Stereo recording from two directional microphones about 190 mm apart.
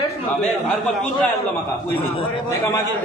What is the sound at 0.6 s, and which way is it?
Speech, 5° left (ahead or behind).